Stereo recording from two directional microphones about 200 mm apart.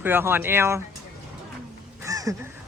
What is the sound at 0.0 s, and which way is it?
Speech, 10° right (ahead or behind).